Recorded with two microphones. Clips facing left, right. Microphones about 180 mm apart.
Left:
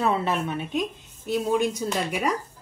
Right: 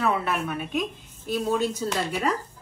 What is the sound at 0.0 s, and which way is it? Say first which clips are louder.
Speech: left 1 dB; 25° left (ahead or behind).